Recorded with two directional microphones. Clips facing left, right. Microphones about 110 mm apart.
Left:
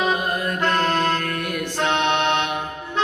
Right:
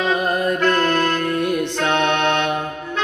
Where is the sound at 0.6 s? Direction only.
25° left (ahead or behind).